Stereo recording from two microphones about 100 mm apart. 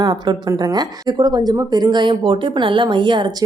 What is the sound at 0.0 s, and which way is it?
A woman's voice, 45° right (ahead or behind).